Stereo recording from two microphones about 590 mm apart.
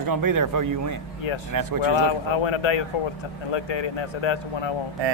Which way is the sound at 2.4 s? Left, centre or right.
Left.